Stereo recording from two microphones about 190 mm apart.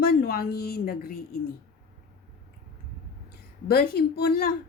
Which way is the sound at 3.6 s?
55° left (ahead or behind).